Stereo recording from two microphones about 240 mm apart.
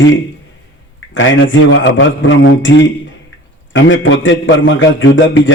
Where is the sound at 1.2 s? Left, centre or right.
Left.